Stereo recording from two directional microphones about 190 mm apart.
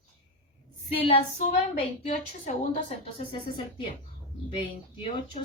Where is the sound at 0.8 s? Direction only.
30° left (ahead or behind).